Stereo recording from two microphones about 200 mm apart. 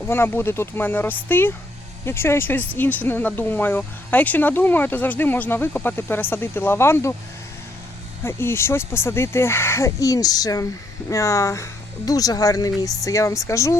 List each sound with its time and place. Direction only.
0.0 s speech: 10° left (ahead or behind)
8.2 s speech: 10° left (ahead or behind)